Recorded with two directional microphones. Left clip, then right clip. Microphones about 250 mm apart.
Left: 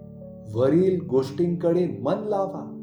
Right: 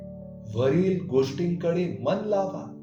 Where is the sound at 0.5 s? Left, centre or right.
Centre.